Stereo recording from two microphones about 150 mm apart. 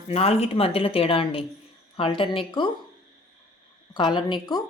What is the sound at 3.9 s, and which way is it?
Speech, 30° left (ahead or behind).